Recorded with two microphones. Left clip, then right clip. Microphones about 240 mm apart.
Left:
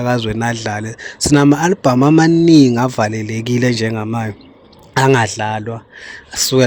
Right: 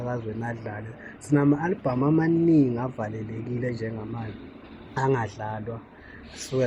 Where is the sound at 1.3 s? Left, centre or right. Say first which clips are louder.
Left 11 dB; left.